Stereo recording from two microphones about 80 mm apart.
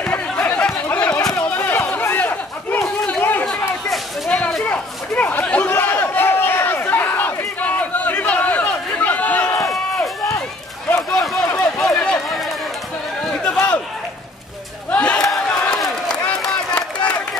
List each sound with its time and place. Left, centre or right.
0.0 s chatter: centre
1.3 s a sound: left
3.1 s chatter: left
4.3 s a sound: centre
4.6 s chatter: left
11.1 s run: centre
14.9 s battle cry: centre
15.5 s crowd: centre